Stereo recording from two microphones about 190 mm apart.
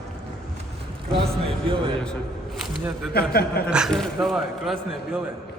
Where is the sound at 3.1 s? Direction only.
55° left (ahead or behind).